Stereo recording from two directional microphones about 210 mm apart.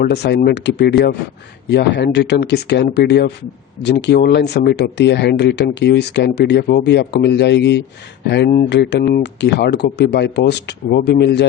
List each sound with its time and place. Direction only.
0.0 s speech: 50° left (ahead or behind)